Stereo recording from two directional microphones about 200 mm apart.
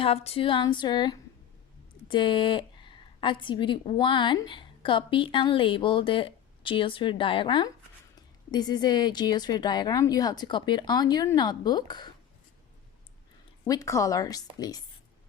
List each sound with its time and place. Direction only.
0.0 s a woman's voice: 30° left (ahead or behind)
13.7 s a woman's voice: 15° left (ahead or behind)